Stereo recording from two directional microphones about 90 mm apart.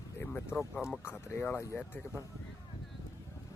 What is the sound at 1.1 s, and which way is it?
Speech, 25° left (ahead or behind).